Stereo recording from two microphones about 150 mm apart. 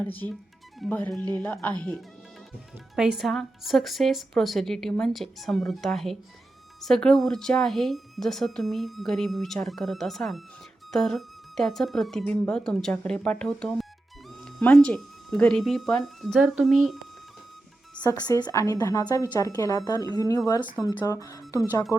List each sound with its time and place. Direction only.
0.0 s speech: 10° left (ahead or behind)
18.1 s a woman's voice: 25° left (ahead or behind)